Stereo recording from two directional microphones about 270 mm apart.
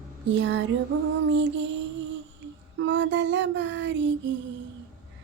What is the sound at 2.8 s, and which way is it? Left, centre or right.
Child singing, right.